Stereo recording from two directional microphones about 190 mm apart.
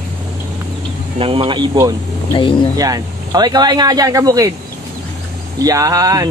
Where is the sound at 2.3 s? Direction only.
25° left (ahead or behind).